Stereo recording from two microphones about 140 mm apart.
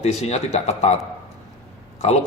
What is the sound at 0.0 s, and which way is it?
Speech, 50° left (ahead or behind).